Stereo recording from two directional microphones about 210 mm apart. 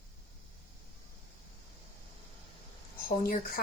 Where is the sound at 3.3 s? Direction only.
45° left (ahead or behind).